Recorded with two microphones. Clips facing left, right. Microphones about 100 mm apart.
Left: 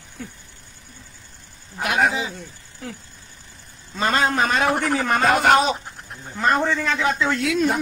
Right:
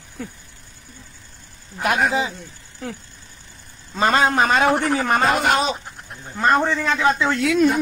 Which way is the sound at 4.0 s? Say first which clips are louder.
Right 3 dB; 25° right (ahead or behind).